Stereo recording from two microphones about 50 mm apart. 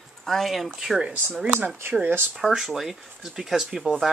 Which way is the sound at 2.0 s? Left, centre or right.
Right.